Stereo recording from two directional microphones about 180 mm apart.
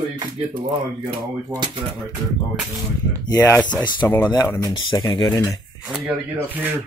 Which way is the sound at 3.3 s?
20° left (ahead or behind).